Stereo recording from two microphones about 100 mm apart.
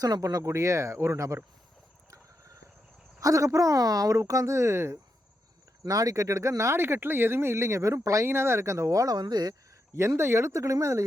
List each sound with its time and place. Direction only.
0.0 s speech: 40° right (ahead or behind)
2.0 s a sound: 35° right (ahead or behind)
3.2 s speech: 35° right (ahead or behind)
5.8 s speech: 35° right (ahead or behind)
9.9 s speech: 30° right (ahead or behind)